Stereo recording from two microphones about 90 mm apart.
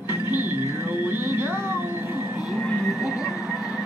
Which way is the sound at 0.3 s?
25° right (ahead or behind).